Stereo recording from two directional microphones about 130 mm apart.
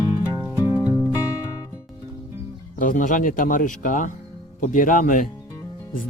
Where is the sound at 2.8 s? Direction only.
90° left.